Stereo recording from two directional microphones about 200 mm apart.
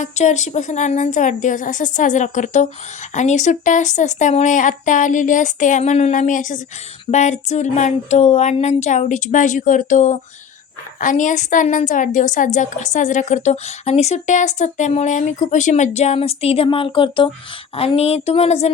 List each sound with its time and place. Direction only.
0.0 s a woman's voice: 35° left (ahead or behind)